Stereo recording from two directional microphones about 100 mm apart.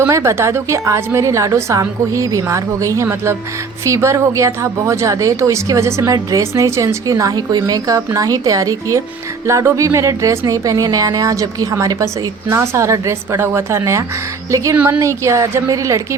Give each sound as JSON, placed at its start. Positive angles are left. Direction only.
{"t": 0.0, "sound": "a woman's voice", "side_deg": -30}